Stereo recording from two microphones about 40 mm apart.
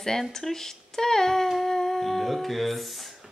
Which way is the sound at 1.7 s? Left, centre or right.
Centre.